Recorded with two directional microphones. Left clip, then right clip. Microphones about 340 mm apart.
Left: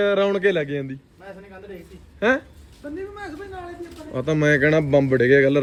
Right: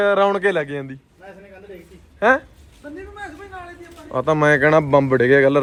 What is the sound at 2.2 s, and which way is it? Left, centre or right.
Speech, centre.